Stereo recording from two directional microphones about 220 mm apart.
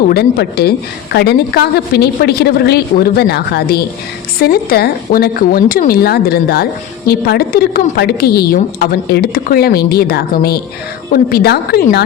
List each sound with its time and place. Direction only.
0.1 s a woman's voice: 45° left (ahead or behind)